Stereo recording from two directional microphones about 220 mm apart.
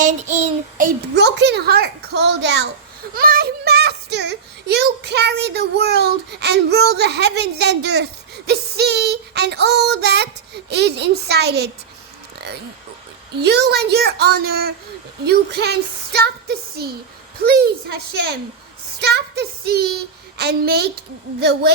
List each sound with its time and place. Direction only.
0.0 s child singing: 30° right (ahead or behind)
1.1 s a child's voice: 50° right (ahead or behind)
13.4 s a child's voice: 50° right (ahead or behind)
18.9 s a sound: 50° right (ahead or behind)
20.4 s a child's voice: 45° right (ahead or behind)